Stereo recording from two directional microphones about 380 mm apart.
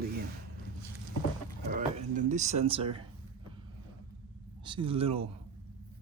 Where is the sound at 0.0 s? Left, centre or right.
Right.